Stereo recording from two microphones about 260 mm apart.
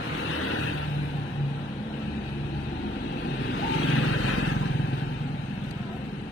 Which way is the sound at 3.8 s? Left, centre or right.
Left.